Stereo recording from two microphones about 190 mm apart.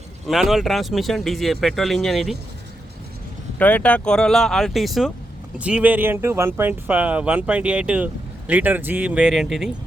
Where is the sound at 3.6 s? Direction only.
10° left (ahead or behind).